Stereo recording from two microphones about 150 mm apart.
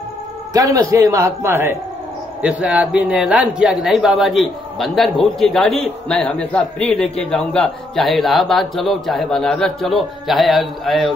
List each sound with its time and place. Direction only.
0.5 s speech: 20° right (ahead or behind); by 11.1 s centre (ahead or behind)